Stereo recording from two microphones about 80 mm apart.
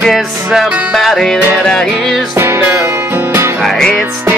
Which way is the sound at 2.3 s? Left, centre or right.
Right.